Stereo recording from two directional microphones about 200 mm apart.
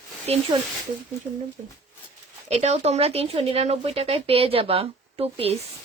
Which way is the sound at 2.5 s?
30° right (ahead or behind).